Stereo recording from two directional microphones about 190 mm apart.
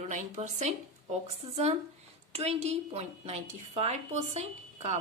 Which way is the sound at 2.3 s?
35° right (ahead or behind).